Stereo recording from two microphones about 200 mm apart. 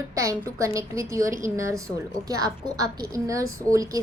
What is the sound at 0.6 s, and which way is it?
A woman's voice, 15° right (ahead or behind).